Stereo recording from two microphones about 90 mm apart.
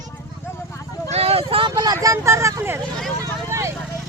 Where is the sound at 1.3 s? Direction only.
85° right; by 1.9 s 65° right (ahead or behind).